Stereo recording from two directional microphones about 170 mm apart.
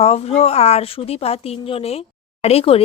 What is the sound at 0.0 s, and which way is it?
A woman's voice, 35° left (ahead or behind).